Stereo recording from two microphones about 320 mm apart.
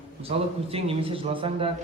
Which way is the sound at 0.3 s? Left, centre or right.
Centre.